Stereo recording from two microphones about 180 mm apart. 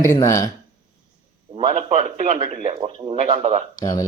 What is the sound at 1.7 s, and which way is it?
A man's voice, 40° right (ahead or behind).